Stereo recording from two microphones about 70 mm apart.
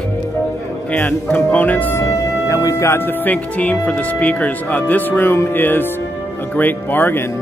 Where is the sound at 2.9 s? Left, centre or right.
Left.